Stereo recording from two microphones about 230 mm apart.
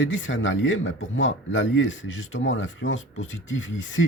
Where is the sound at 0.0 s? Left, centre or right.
Left.